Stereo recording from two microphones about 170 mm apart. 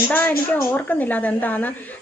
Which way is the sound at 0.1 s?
10° left (ahead or behind).